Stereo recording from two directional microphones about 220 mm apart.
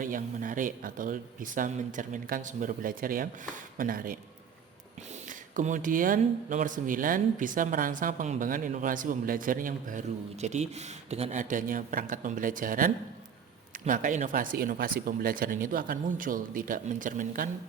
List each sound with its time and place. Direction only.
0.0 s speech: 40° right (ahead or behind)
5.3 s speech: 35° right (ahead or behind)